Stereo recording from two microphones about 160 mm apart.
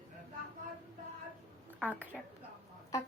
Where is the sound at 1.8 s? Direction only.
10° right (ahead or behind).